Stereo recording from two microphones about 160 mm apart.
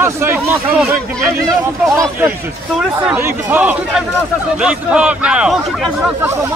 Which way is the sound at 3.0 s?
10° right (ahead or behind).